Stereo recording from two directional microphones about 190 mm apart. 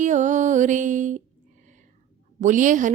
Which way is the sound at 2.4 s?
40° right (ahead or behind).